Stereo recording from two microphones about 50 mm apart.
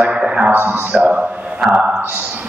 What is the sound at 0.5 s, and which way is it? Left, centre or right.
Speech, right.